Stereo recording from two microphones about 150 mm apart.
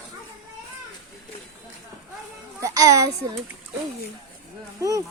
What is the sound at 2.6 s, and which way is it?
Speech, 20° right (ahead or behind).